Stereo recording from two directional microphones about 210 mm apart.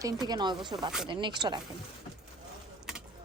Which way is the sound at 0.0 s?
20° right (ahead or behind).